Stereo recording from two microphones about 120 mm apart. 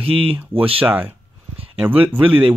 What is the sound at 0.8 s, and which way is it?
Speech, 10° right (ahead or behind).